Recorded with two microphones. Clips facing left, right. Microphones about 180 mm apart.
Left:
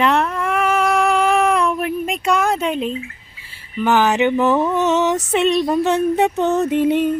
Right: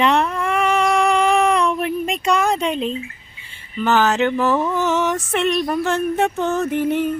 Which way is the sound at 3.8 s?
15° left (ahead or behind).